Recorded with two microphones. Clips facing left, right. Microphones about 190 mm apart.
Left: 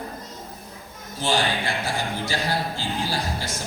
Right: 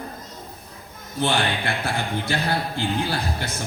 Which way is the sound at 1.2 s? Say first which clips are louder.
Right 1 dB; 60° right (ahead or behind).